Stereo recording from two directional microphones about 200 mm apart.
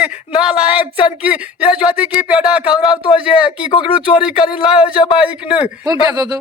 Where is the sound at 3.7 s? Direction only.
25° left (ahead or behind).